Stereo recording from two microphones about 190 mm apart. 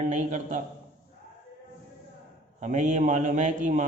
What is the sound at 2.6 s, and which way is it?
A man's voice, 40° right (ahead or behind).